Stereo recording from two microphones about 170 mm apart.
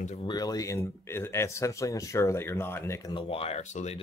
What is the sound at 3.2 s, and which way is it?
Speech, 35° left (ahead or behind).